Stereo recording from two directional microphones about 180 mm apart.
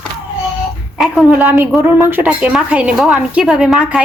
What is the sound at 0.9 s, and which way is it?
A woman's voice, 5° right (ahead or behind).